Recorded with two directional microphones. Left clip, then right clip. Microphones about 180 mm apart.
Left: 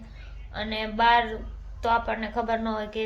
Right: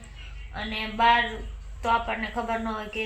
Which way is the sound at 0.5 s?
10° left (ahead or behind).